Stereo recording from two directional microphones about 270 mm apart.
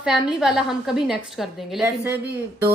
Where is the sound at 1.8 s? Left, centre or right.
Centre.